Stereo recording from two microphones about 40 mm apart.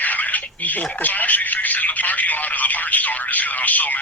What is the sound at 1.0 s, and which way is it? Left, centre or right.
Telephone, left.